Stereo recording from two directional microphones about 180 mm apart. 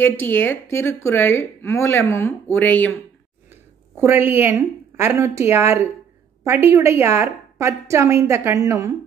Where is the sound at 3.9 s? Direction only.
15° right (ahead or behind).